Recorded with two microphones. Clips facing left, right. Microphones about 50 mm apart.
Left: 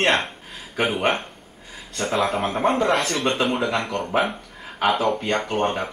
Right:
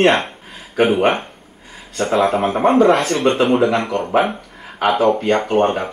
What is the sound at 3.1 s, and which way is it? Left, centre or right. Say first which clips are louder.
Speech: right 7 dB; right.